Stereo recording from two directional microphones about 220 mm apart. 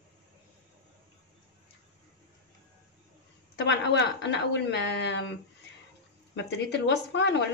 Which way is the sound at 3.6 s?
55° left (ahead or behind).